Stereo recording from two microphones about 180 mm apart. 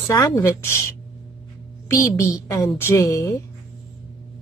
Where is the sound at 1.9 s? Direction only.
20° left (ahead or behind).